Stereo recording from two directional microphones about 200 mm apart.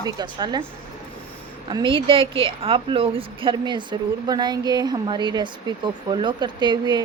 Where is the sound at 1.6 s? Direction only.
25° right (ahead or behind).